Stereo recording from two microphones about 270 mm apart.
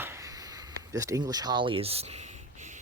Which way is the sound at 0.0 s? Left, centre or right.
Centre.